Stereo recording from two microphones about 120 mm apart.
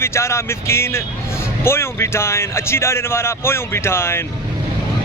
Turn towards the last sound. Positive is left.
turn(degrees=20)  # may be behind; listen again after turning